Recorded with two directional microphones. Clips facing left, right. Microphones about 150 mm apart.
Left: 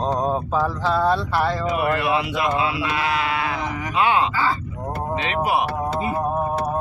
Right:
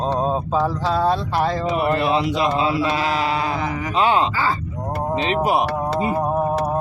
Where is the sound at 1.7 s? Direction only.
30° right (ahead or behind).